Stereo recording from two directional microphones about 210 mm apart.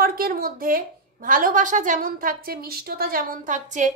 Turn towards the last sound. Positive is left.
turn(degrees=-35)  # may be behind; listen again after turning